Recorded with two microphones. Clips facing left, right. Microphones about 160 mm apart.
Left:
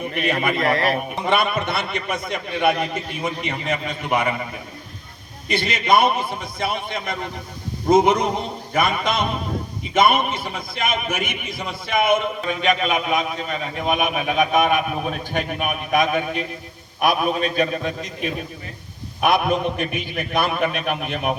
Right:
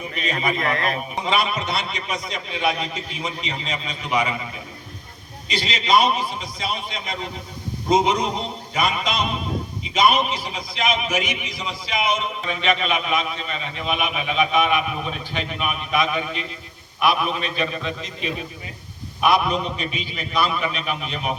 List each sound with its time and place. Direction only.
0.0 s a man's voice: 55° left (ahead or behind)
0.6 s speech: 35° left (ahead or behind)
0.9 s a man's voice: 55° left (ahead or behind)
5.5 s a man's voice: 55° left (ahead or behind)